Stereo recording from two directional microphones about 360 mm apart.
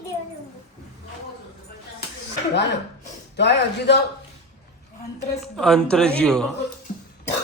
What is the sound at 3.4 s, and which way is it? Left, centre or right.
Speech, left.